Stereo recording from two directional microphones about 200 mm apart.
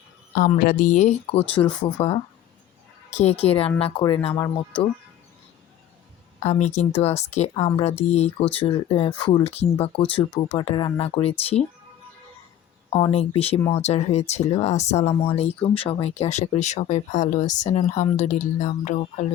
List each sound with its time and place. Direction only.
0.3 s speech: 40° left (ahead or behind); by 4.6 s 15° left (ahead or behind)
6.4 s speech: 35° left (ahead or behind)
13.1 s speech: 30° left (ahead or behind)